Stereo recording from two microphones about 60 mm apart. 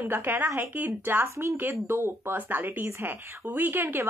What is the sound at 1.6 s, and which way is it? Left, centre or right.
Speech, right.